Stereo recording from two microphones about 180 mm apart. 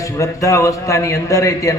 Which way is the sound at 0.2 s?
15° left (ahead or behind).